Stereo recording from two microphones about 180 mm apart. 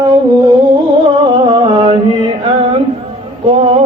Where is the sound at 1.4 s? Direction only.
25° right (ahead or behind).